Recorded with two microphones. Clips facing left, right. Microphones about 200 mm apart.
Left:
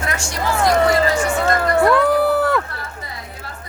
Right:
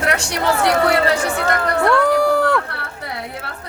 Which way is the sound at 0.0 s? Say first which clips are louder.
Right 4 dB; 70° right (ahead or behind).